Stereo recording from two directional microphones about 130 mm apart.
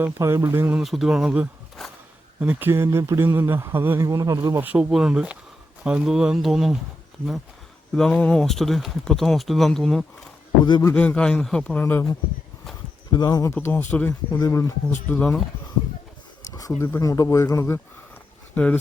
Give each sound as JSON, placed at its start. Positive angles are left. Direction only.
{"t": 0.0, "sound": "speech", "side_deg": -20}
{"t": 0.8, "sound": "speech", "side_deg": 0}
{"t": 4.1, "sound": "speech", "side_deg": -30}
{"t": 4.5, "sound": "speech", "side_deg": -10}
{"t": 7.9, "sound": "speech", "side_deg": 5}
{"t": 10.6, "sound": "a man's voice", "side_deg": 35}
{"t": 10.9, "sound": "a man's voice", "side_deg": 10}
{"t": 13.1, "sound": "speech", "side_deg": 35}
{"t": 13.6, "sound": "a man's voice", "side_deg": 15}
{"t": 14.1, "sound": "speech", "side_deg": 25}
{"t": 15.1, "sound": "a man's voice", "side_deg": 10}
{"t": 16.4, "sound": "speech", "side_deg": 25}
{"t": 18.5, "sound": "speech", "side_deg": 10}